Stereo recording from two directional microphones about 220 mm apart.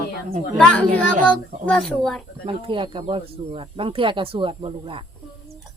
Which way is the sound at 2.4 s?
25° right (ahead or behind).